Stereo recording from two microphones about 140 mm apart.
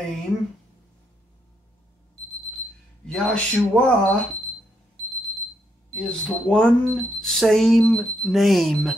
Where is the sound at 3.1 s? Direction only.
5° left (ahead or behind).